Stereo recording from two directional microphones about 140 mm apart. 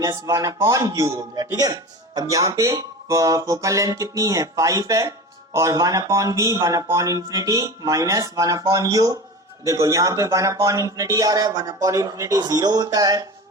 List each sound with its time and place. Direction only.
0.0 s a man's voice: 25° right (ahead or behind)